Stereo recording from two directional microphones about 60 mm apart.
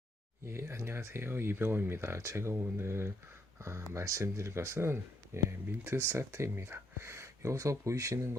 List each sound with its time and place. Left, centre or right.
0.4 s speech: right